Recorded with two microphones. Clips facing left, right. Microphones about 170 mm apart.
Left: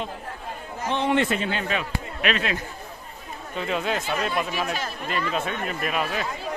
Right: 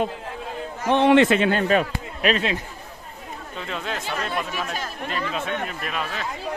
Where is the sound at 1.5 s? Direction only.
45° right (ahead or behind).